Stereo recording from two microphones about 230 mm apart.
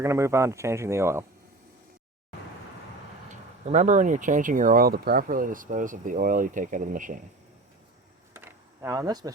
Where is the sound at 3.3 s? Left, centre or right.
Right.